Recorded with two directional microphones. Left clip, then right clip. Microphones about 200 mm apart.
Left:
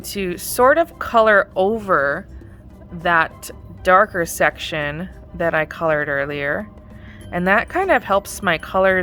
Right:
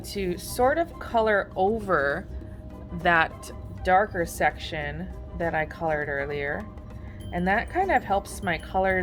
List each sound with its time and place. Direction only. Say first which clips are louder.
0.0 s speech: left 5 dB; 40° left (ahead or behind); by 3.3 s 20° left (ahead or behind)
3.4 s speech: left 9 dB; 40° left (ahead or behind)